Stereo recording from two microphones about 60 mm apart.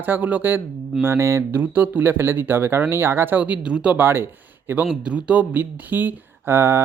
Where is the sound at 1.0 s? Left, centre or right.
Right.